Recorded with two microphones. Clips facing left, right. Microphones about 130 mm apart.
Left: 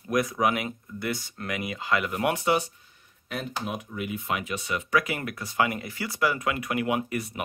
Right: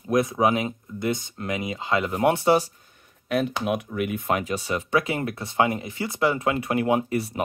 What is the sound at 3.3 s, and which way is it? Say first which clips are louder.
Speech: right 8 dB; 70° right (ahead or behind).